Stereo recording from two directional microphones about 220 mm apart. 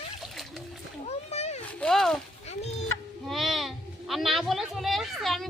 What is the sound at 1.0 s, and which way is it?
Splash, 30° left (ahead or behind).